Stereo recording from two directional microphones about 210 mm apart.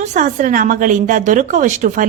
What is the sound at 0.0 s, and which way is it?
A woman's voice, 35° right (ahead or behind).